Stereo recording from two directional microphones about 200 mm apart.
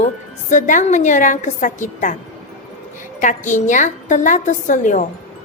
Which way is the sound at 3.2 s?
40° left (ahead or behind).